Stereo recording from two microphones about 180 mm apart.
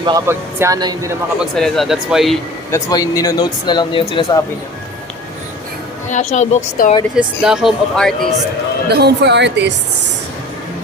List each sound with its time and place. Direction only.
0.3 s speech: 15° right (ahead or behind)
1.4 s speech: centre (ahead or behind)
2.7 s speech: 20° left (ahead or behind)
6.1 s speech: 40° left (ahead or behind)
7.2 s speech: 5° right (ahead or behind)
8.9 s a woman's voice: 65° right (ahead or behind)